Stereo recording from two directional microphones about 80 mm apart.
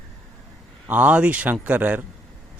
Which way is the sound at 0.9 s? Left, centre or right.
Right.